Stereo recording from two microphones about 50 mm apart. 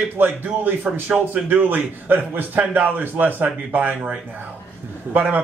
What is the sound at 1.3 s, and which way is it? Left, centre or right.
A man's voice, right.